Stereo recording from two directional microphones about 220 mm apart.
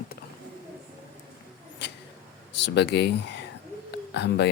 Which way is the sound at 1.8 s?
50° left (ahead or behind).